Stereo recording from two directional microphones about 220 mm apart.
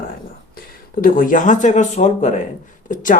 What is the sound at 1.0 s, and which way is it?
Speech, 40° left (ahead or behind).